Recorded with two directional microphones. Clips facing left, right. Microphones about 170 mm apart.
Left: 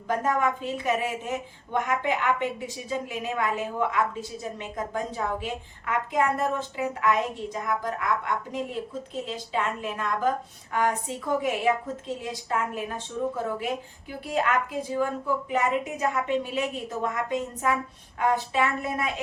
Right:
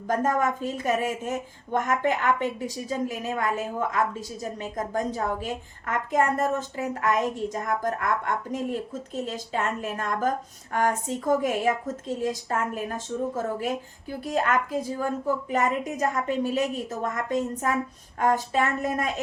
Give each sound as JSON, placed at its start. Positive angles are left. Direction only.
{"t": 0.1, "sound": "a woman's voice", "side_deg": -45}
{"t": 14.3, "sound": "a woman's voice", "side_deg": -45}